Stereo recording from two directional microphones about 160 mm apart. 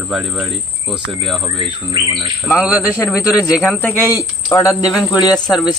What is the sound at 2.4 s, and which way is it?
Speech, 5° right (ahead or behind).